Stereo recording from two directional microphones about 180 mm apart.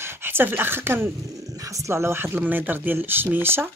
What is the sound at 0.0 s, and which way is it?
Speech, 10° right (ahead or behind).